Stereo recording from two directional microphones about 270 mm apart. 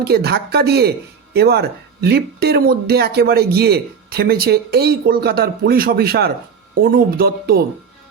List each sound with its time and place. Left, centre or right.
0.0 s speech: right